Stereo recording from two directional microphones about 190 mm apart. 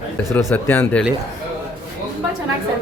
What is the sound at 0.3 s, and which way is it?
Speech, 10° left (ahead or behind).